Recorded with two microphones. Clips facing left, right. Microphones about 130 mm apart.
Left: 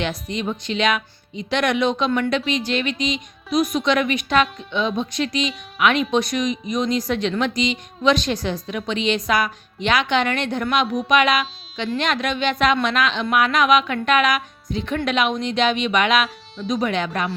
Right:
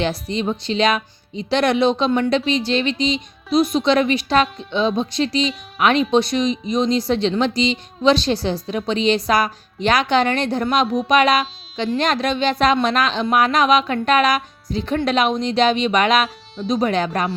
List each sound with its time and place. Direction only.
0.0 s speech: 30° right (ahead or behind)